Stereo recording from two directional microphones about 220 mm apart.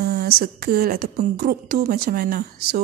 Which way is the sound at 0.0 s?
45° right (ahead or behind).